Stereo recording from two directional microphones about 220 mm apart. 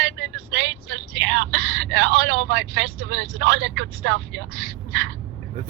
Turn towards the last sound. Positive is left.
turn(degrees=-55)  # may be behind; listen again after turning